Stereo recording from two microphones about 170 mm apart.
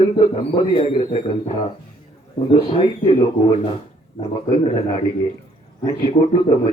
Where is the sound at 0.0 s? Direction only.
30° left (ahead or behind).